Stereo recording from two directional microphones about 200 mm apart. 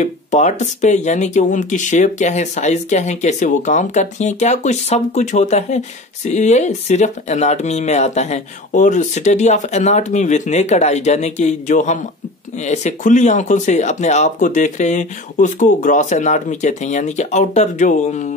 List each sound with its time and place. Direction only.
0.0 s speech: 35° left (ahead or behind)